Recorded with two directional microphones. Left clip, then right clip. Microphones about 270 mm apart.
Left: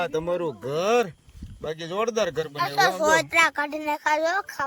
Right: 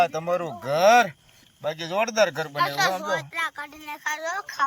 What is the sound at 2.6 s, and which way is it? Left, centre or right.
Speech, left.